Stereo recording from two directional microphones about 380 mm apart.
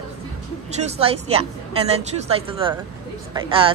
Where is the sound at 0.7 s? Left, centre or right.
Centre.